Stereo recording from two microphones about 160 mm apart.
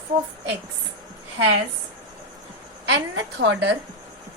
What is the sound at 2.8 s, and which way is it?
Speech, 90° right.